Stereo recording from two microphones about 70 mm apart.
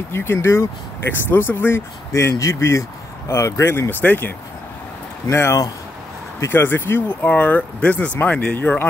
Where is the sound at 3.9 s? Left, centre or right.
Left.